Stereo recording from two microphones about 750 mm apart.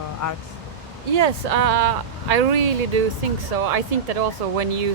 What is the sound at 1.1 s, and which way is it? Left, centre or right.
Speech, right.